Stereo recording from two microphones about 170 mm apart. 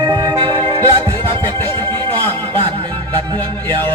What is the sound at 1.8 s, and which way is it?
Music, 10° left (ahead or behind).